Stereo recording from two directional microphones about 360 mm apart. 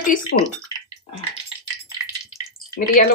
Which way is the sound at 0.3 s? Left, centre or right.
Left.